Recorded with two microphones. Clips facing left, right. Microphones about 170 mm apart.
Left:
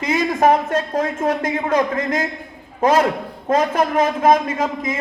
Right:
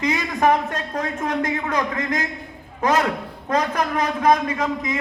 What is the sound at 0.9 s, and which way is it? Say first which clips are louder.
A man's voice: left 1 dB; 30° left (ahead or behind).